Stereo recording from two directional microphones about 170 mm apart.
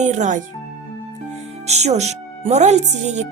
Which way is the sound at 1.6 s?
40° right (ahead or behind).